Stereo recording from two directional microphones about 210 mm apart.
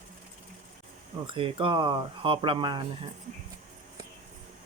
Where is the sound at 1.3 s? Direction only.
25° right (ahead or behind).